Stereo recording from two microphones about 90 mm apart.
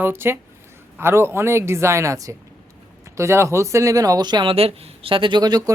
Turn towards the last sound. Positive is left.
turn(degrees=-50)  # may be behind; listen again after turning